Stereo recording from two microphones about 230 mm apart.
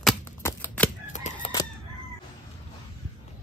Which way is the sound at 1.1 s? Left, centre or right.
Left.